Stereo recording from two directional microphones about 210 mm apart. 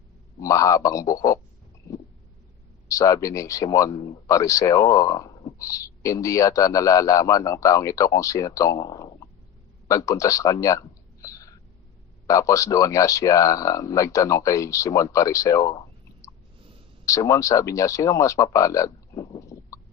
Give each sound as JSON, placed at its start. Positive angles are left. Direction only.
{"t": 0.3, "sound": "speech", "side_deg": 15}
{"t": 2.9, "sound": "speech", "side_deg": 15}
{"t": 9.9, "sound": "a sound", "side_deg": 15}
{"t": 12.3, "sound": "speech", "side_deg": 15}
{"t": 17.1, "sound": "speech", "side_deg": 15}